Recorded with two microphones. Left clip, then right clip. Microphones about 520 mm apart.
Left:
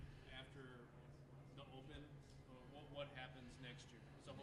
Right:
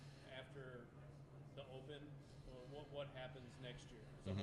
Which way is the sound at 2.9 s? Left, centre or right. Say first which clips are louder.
Right 1 dB; right.